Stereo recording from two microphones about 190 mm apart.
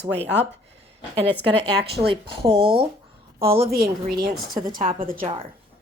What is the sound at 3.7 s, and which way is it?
Speech, 50° right (ahead or behind).